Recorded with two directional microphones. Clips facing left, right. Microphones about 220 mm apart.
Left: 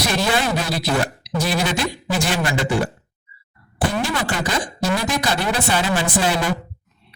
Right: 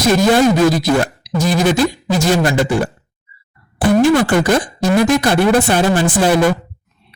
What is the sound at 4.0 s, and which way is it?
Speech, 50° right (ahead or behind).